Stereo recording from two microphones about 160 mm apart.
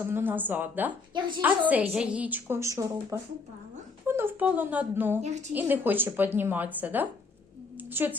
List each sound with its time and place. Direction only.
0.0 s a woman's voice: 15° right (ahead or behind)
5.2 s a woman's voice: 45° right (ahead or behind)
5.5 s a woman's voice: 10° right (ahead or behind)
7.8 s a sound: 10° right (ahead or behind)